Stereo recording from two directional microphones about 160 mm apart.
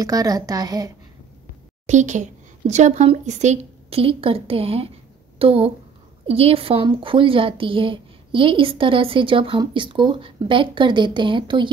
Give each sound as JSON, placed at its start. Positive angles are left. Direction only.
{"t": 0.0, "sound": "a woman's voice", "side_deg": -20}
{"t": 1.9, "sound": "a woman's voice", "side_deg": -50}